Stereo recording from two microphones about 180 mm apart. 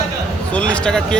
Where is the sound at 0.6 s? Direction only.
5° left (ahead or behind).